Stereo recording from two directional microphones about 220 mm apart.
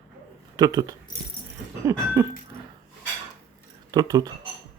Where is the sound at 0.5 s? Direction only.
15° right (ahead or behind).